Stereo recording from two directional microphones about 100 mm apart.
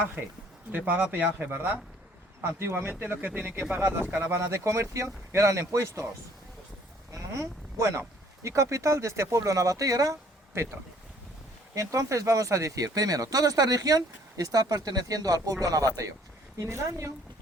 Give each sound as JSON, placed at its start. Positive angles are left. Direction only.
{"t": 0.7, "sound": "speech", "side_deg": -20}
{"t": 7.1, "sound": "speech", "side_deg": -30}
{"t": 11.7, "sound": "speech", "side_deg": -30}